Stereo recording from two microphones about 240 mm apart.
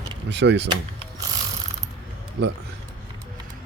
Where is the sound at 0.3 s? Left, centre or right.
Right.